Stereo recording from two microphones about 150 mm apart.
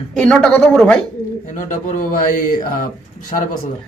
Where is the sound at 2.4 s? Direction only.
65° left (ahead or behind).